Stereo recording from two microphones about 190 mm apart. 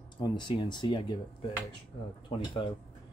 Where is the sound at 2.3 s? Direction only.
25° left (ahead or behind).